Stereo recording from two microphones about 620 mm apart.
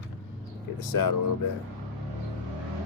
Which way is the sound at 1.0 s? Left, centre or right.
Left.